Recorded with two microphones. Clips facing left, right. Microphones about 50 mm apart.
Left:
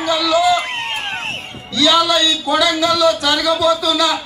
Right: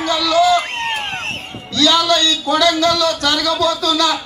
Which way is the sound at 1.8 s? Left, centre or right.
Centre.